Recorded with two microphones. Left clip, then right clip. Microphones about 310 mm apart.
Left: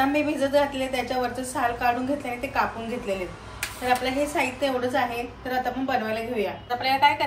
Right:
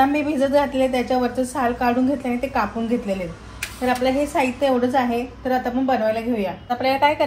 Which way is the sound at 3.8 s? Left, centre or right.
Centre.